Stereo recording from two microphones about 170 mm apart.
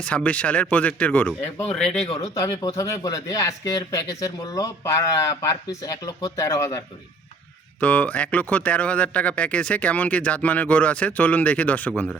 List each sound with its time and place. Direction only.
0.0 s speech: 5° left (ahead or behind)
2.0 s speech: 40° left (ahead or behind)
2.3 s speech: 20° left (ahead or behind)
7.8 s speech: 10° left (ahead or behind)